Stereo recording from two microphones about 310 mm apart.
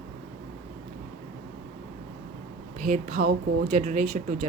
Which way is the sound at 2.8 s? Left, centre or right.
Right.